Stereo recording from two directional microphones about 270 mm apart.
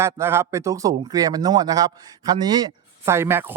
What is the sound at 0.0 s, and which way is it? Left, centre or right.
Speech, centre.